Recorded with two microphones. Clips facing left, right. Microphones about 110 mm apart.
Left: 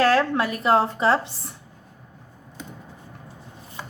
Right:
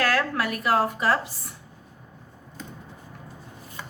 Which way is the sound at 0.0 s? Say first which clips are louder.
Left 5 dB; 30° left (ahead or behind).